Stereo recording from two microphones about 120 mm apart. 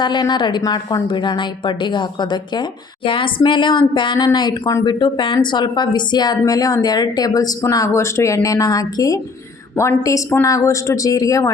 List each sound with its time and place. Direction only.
0.0 s a woman's voice: 40° left (ahead or behind)